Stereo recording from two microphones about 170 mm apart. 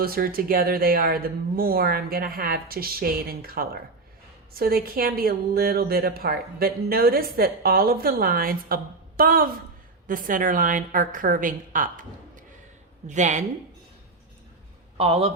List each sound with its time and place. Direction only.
0.0 s a woman's voice: 60° right (ahead or behind); by 13.4 s 45° right (ahead or behind)
14.9 s a man's voice: 35° right (ahead or behind)